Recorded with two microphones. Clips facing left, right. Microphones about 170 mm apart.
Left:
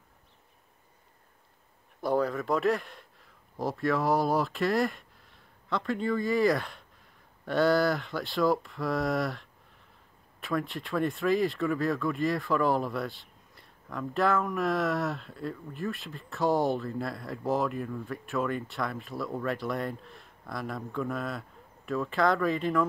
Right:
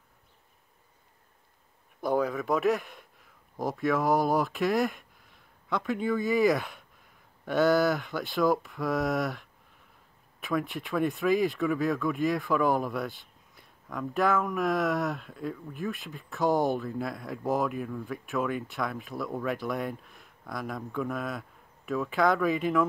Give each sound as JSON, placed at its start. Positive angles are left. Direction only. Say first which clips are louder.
{"t": 2.0, "sound": "speech", "louder": "even", "side_deg": 0}
{"t": 10.4, "sound": "speech", "louder": "right 1 dB", "side_deg": 0}